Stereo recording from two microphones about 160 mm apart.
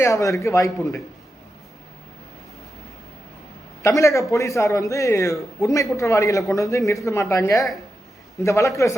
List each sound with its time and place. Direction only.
0.0 s a man's voice: 20° left (ahead or behind)
3.8 s a man's voice: 20° left (ahead or behind)